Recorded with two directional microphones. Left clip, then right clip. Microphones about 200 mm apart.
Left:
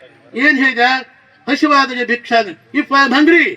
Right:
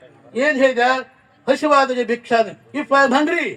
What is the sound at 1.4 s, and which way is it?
A man's voice, 60° right (ahead or behind).